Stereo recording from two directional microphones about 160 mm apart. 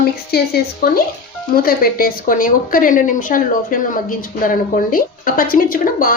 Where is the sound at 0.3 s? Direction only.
80° left.